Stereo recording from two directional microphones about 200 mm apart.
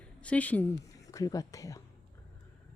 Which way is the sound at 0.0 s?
5° left (ahead or behind).